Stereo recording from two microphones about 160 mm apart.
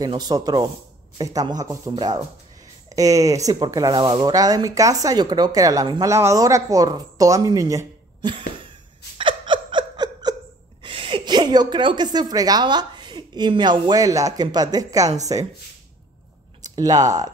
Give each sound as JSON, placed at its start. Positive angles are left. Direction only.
{"t": 0.0, "sound": "speech", "side_deg": -25}
{"t": 9.2, "sound": "a sound", "side_deg": -30}
{"t": 10.8, "sound": "a woman's voice", "side_deg": -35}
{"t": 16.6, "sound": "speech", "side_deg": -25}